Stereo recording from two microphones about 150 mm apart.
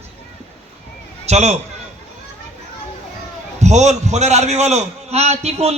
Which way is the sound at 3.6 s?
50° right (ahead or behind).